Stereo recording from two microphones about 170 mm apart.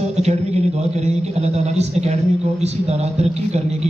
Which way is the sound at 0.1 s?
40° right (ahead or behind).